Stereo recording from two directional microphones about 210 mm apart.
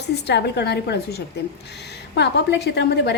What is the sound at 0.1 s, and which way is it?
A woman's voice, 50° left (ahead or behind).